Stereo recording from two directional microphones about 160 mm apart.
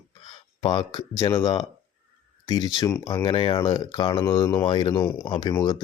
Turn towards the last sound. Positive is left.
turn(degrees=25)  # may be behind; listen again after turning